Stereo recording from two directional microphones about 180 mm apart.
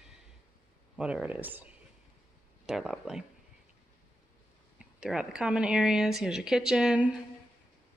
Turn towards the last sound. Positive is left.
turn(degrees=-5)  # may be behind; listen again after turning